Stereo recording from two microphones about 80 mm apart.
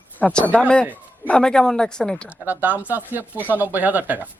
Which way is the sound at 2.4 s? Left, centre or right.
Right.